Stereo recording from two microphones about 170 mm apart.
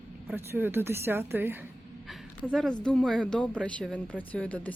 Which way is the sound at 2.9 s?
5° left (ahead or behind).